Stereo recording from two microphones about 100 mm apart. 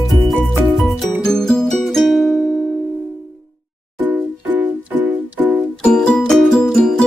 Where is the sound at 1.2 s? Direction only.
5° left (ahead or behind).